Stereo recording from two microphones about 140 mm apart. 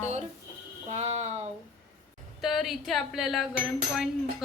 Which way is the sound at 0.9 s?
50° right (ahead or behind).